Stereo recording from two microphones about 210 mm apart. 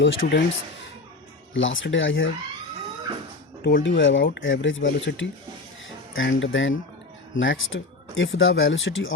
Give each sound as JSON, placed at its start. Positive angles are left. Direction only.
{"t": 0.0, "sound": "speech", "side_deg": 55}
{"t": 1.5, "sound": "speech", "side_deg": 65}
{"t": 3.6, "sound": "speech", "side_deg": 50}